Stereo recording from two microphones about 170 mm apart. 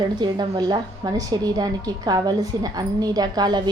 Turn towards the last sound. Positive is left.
turn(degrees=-25)  # may be behind; listen again after turning